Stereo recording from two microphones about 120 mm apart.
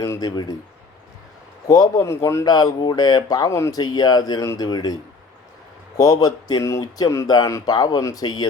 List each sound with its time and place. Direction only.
0.0 s speech: 30° left (ahead or behind)
1.6 s speech: 30° left (ahead or behind)
6.0 s speech: 30° left (ahead or behind)